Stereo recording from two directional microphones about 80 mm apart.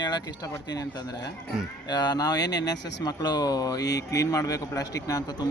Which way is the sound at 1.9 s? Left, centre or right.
Left.